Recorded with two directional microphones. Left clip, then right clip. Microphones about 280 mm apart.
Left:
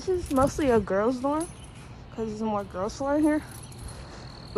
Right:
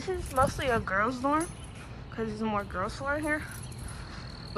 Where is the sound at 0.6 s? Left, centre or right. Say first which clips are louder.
Left 6 dB; left.